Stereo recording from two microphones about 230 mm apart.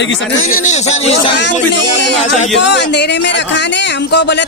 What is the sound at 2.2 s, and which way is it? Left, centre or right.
Speech, left.